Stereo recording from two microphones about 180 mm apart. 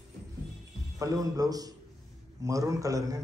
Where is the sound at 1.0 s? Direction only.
20° right (ahead or behind).